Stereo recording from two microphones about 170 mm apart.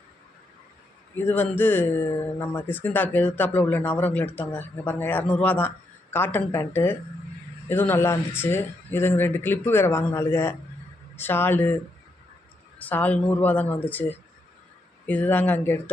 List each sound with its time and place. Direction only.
1.1 s speech: 10° left (ahead or behind)
12.8 s speech: 10° left (ahead or behind)